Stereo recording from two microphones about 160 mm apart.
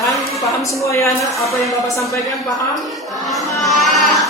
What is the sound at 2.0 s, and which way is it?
Speech, 20° left (ahead or behind).